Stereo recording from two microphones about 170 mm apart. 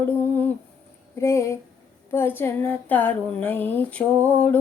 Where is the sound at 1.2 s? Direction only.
15° left (ahead or behind).